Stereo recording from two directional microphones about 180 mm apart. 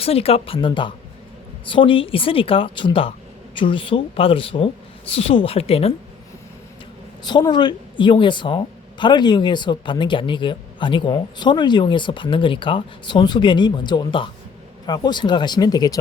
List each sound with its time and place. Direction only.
0.0 s a woman's voice: 35° left (ahead or behind)
7.3 s a woman's voice: 25° left (ahead or behind)